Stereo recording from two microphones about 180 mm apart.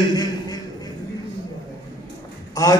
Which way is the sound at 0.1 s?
20° left (ahead or behind).